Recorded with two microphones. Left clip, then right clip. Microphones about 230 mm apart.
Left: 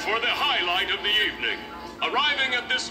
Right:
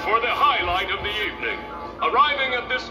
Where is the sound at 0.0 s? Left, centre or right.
Left.